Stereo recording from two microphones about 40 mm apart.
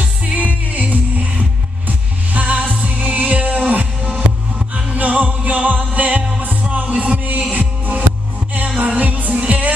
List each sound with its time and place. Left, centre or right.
0.2 s music: right
4.9 s music: right